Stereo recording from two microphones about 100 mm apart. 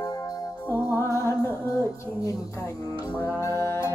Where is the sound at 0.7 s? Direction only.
25° left (ahead or behind).